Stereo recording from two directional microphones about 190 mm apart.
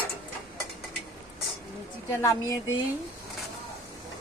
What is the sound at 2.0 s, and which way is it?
Speech, 20° left (ahead or behind).